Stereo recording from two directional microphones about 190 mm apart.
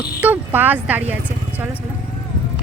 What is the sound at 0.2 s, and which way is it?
Speech, 10° right (ahead or behind).